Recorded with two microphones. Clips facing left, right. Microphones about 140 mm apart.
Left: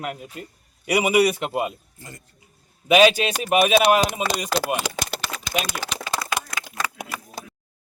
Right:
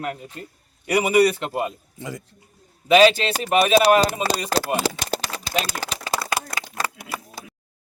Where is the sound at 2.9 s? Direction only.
10° left (ahead or behind).